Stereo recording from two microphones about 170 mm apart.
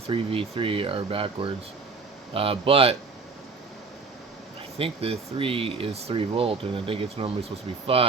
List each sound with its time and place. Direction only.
0.1 s speech: 35° right (ahead or behind)
4.8 s speech: 35° right (ahead or behind)